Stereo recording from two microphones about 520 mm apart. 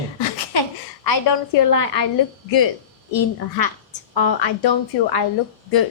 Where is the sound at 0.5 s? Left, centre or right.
Left.